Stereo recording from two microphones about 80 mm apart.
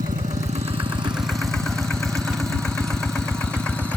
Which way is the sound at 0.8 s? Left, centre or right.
Right.